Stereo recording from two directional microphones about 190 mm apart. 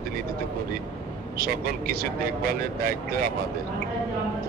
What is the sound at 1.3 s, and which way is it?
Speech, 50° right (ahead or behind).